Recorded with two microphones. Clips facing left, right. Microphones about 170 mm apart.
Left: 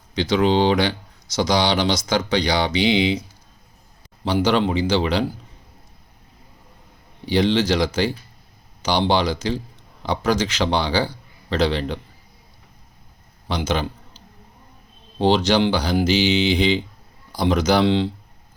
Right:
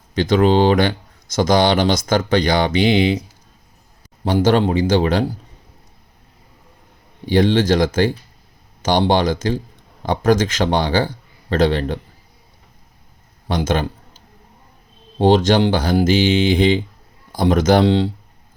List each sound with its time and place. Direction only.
0.2 s speech: 50° right (ahead or behind)
4.2 s speech: 45° right (ahead or behind)
7.3 s speech: 50° right (ahead or behind)
13.5 s a man's voice: 50° right (ahead or behind)
15.2 s speech: 50° right (ahead or behind)